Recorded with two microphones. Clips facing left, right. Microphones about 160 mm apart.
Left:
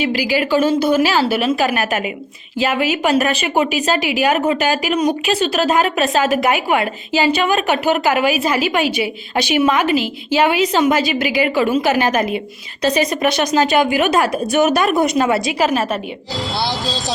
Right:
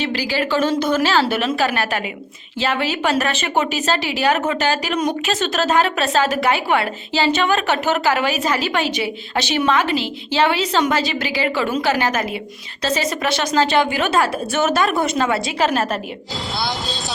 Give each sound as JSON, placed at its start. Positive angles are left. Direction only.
{"t": 0.0, "sound": "a woman's voice", "side_deg": 10}